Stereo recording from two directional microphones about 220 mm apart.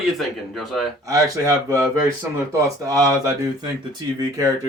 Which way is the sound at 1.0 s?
15° right (ahead or behind).